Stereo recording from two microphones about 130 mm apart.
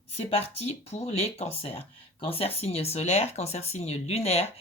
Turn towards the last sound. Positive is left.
turn(degrees=50)  # may be behind; listen again after turning